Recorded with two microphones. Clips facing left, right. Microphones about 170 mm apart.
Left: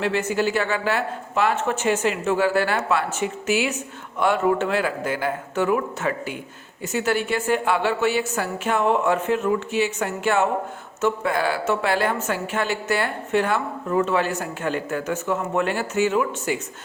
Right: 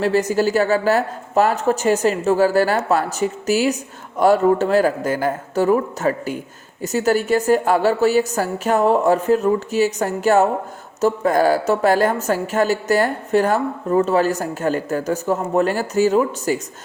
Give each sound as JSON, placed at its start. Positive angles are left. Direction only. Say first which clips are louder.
{"t": 0.0, "sound": "a woman's voice", "louder": "right 5 dB", "side_deg": -40}